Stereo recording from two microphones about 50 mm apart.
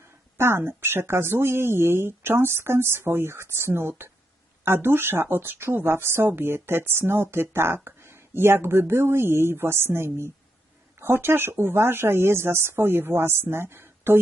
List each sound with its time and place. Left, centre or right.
0.3 s speech: right